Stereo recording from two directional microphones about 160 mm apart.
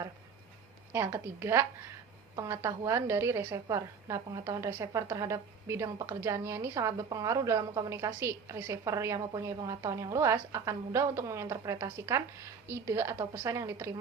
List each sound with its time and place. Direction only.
0.9 s a woman's voice: 15° right (ahead or behind)